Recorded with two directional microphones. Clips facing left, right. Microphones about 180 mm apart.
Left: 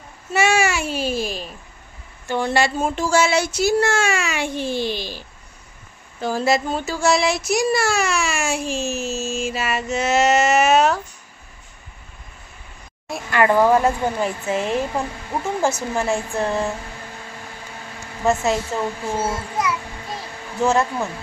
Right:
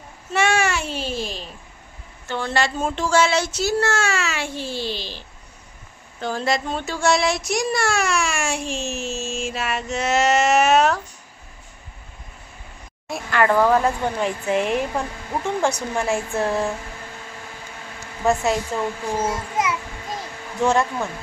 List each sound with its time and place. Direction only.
0.3 s babbling: 10° left (ahead or behind)
2.2 s speech: 15° left (ahead or behind)
13.1 s speech: 5° left (ahead or behind)
18.2 s speech: centre (ahead or behind)
19.0 s a child's voice: 15° right (ahead or behind)
20.6 s speech: 5° left (ahead or behind)